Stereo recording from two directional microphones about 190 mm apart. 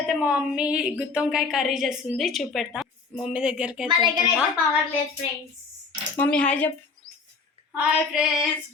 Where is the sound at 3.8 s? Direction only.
25° right (ahead or behind).